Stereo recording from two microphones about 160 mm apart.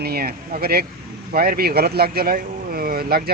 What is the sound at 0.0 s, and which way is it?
Speech, 75° right (ahead or behind).